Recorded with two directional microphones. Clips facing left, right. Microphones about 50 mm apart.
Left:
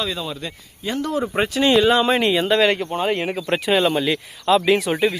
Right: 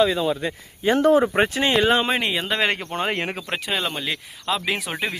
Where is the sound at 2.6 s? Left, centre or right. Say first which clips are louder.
Left 5 dB; right.